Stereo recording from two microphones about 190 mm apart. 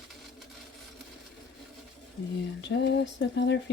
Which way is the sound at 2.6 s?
65° left (ahead or behind).